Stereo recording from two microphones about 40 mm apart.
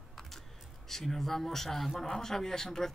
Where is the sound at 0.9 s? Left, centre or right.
Centre.